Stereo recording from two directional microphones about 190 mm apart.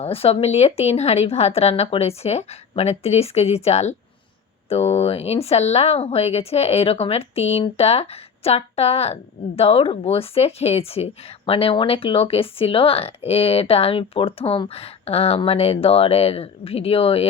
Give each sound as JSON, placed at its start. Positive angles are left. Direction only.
{"t": 0.0, "sound": "speech", "side_deg": 30}